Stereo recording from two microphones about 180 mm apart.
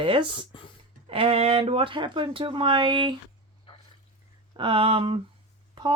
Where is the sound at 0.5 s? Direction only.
25° left (ahead or behind).